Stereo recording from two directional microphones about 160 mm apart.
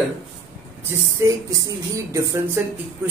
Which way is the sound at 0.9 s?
20° right (ahead or behind).